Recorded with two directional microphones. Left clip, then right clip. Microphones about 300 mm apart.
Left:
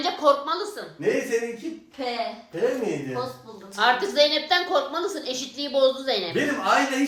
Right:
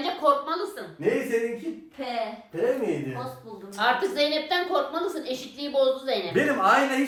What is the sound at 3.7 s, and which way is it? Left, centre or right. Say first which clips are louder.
A woman's voice: left 4 dB; left.